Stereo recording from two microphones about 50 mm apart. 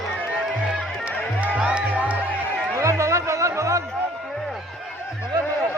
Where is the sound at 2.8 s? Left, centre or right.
Right.